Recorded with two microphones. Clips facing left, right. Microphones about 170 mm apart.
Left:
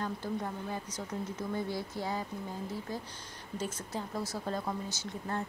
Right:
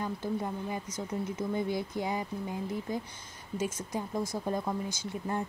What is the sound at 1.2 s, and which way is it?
Speech, 15° right (ahead or behind).